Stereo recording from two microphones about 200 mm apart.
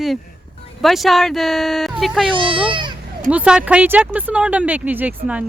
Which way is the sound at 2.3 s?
25° right (ahead or behind).